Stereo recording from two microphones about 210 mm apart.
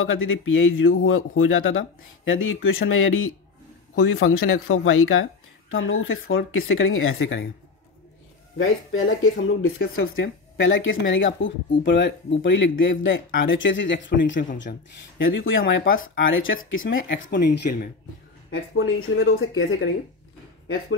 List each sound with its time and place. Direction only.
0.0 s a man's voice: 70° left (ahead or behind)
8.5 s a man's voice: 70° left (ahead or behind)
15.6 s speech: 50° left (ahead or behind)
15.9 s a man's voice: 70° left (ahead or behind); by 17.7 s 50° left (ahead or behind)
19.1 s speech: 50° left (ahead or behind)